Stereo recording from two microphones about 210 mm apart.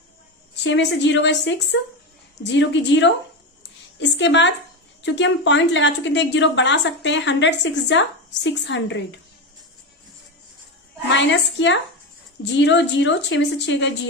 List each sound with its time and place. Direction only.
0.6 s a woman's voice: 55° left (ahead or behind)
11.1 s a woman's voice: 55° left (ahead or behind)
12.5 s a woman's voice: 55° left (ahead or behind)